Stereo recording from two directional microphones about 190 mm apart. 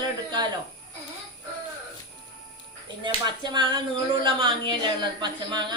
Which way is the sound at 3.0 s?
25° right (ahead or behind).